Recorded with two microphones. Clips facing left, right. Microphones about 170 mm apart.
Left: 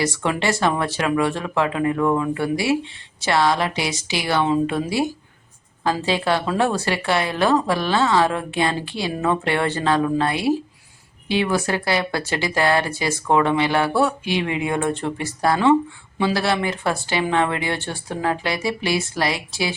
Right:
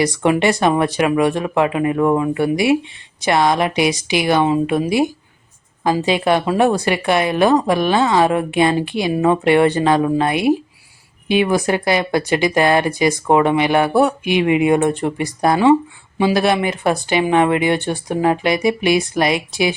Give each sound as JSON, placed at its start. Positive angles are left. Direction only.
{"t": 0.0, "sound": "speech", "side_deg": -15}